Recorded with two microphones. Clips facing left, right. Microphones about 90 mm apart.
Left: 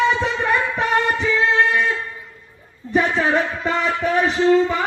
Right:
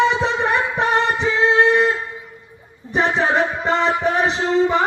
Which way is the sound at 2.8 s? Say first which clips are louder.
Left 4 dB; 15° right (ahead or behind).